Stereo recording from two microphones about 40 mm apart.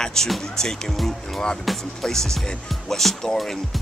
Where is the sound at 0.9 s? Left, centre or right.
Centre.